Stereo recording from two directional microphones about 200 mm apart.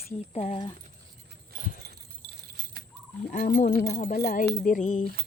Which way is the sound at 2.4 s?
50° right (ahead or behind).